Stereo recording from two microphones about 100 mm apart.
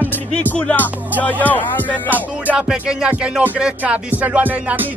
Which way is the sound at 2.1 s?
15° right (ahead or behind).